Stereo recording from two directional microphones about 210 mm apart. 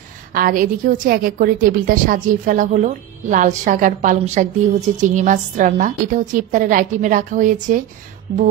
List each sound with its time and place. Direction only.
0.3 s a woman's voice: 40° right (ahead or behind)